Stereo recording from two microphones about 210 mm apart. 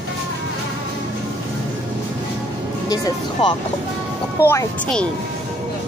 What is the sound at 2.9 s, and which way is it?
Speech, 20° left (ahead or behind).